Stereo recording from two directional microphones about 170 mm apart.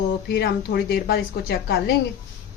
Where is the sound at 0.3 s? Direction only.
65° left (ahead or behind).